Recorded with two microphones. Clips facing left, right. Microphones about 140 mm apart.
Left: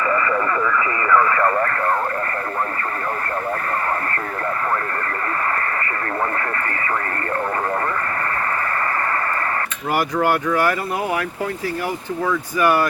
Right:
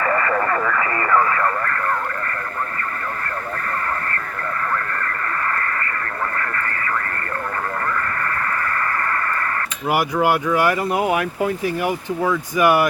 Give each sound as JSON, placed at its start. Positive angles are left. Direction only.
{"t": 0.0, "sound": "radio", "side_deg": -45}
{"t": 9.9, "sound": "speech", "side_deg": -10}